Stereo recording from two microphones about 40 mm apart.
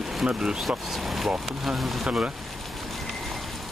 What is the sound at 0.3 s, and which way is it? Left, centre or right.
Speech, right.